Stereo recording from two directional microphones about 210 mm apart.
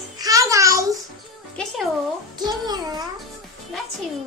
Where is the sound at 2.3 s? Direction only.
20° right (ahead or behind).